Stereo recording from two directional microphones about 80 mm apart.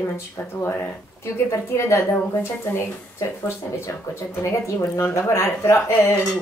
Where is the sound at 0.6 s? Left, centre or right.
Left.